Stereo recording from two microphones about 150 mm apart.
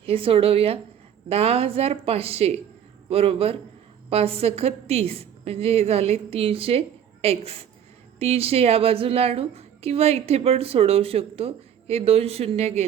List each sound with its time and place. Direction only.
0.0 s a woman's voice: 40° right (ahead or behind)